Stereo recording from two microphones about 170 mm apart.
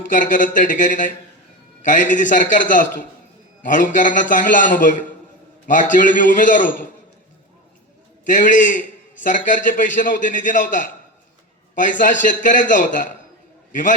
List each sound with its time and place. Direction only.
0.1 s a man's voice: 50° left (ahead or behind)
8.3 s a man's voice: 50° left (ahead or behind)